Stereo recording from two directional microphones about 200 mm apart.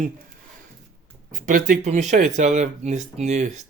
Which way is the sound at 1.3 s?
40° right (ahead or behind).